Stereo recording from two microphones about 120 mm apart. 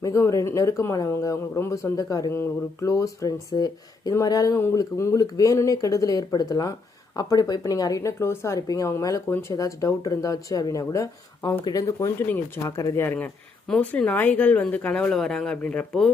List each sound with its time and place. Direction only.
0.0 s speech: 25° left (ahead or behind)